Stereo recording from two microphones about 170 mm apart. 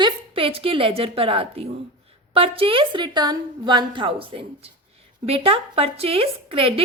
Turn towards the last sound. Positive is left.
turn(degrees=-35)  # may be behind; listen again after turning